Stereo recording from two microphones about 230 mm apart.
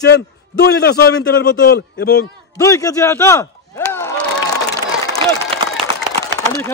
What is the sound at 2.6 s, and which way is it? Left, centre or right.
Speech, centre.